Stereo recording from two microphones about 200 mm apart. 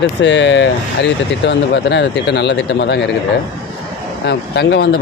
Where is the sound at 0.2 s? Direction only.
60° left (ahead or behind).